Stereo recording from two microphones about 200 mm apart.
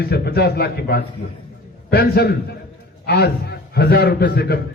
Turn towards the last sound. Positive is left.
turn(degrees=55)  # may be behind; listen again after turning